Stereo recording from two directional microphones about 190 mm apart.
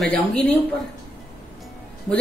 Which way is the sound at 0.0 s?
5° left (ahead or behind).